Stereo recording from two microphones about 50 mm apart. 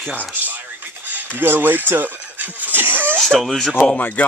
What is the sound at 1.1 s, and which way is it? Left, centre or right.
Speech, right.